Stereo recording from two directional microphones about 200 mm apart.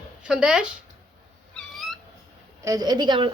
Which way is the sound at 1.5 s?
Centre (ahead or behind).